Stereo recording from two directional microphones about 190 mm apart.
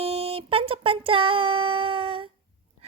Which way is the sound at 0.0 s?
30° right (ahead or behind).